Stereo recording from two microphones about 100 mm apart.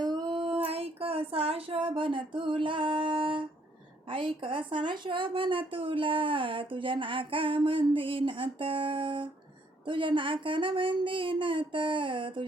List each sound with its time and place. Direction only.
0.0 s child singing: 45° right (ahead or behind)
0.3 s child singing: 70° right (ahead or behind)
4.1 s a woman's voice: 60° right (ahead or behind)